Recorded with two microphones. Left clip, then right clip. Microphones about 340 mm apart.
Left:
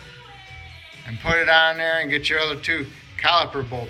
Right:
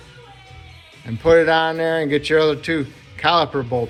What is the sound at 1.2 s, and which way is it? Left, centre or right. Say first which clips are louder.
Speech: right 3 dB; centre.